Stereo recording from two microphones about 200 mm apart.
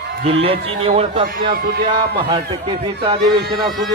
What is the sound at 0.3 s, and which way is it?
A man's voice, 30° right (ahead or behind).